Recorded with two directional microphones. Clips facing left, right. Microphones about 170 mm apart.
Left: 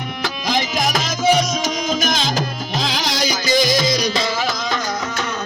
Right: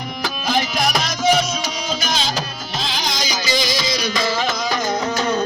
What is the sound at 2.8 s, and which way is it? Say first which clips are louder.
Music: left 3 dB; 85° left.